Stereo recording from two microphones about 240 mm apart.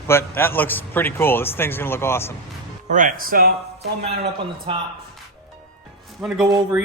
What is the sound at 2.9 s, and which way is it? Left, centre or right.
Speech, right.